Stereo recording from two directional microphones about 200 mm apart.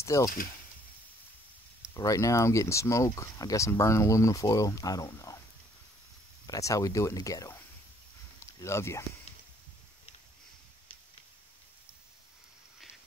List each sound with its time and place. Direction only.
0.0 s speech: 15° left (ahead or behind)
2.0 s speech: 15° left (ahead or behind)
6.4 s speech: 15° left (ahead or behind)
8.5 s speech: 15° left (ahead or behind)